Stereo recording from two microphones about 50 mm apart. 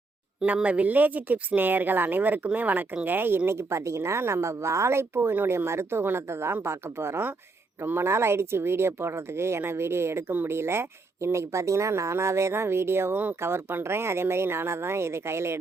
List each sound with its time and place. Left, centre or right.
0.4 s speech: right